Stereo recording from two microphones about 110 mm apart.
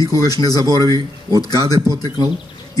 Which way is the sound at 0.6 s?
35° right (ahead or behind).